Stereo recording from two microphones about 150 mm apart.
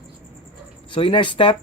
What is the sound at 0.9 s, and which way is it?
Speech, 35° left (ahead or behind).